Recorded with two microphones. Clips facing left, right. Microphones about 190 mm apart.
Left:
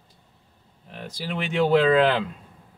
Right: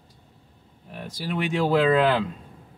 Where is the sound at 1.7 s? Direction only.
Centre (ahead or behind).